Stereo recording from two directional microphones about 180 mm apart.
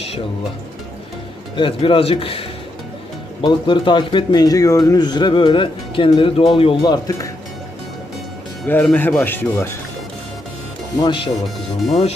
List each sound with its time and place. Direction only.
1.6 s speech: 30° left (ahead or behind)
3.4 s speech: 25° left (ahead or behind)
8.6 s speech: 10° left (ahead or behind)
11.0 s speech: 25° left (ahead or behind)